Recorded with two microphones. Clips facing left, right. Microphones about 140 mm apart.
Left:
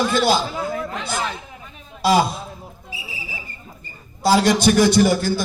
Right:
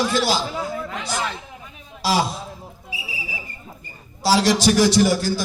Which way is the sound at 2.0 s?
55° left (ahead or behind).